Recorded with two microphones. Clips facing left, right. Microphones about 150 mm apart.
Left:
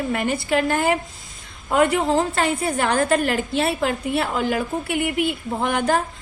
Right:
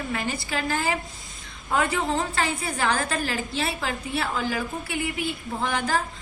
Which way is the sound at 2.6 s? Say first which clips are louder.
Left 5 dB; 55° left (ahead or behind).